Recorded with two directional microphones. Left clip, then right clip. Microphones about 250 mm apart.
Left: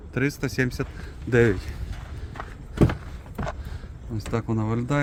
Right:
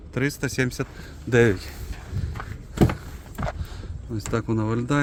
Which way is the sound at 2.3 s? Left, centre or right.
Centre.